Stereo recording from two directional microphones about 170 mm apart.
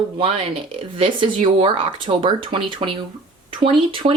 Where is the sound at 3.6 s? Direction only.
30° right (ahead or behind).